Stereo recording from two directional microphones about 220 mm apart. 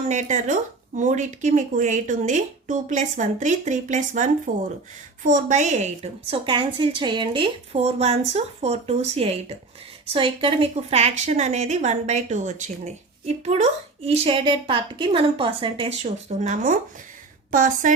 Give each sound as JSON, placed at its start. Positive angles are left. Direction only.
{"t": 0.1, "sound": "speech", "side_deg": -35}